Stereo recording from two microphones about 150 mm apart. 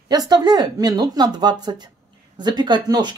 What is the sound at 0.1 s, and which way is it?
Speech, 25° right (ahead or behind).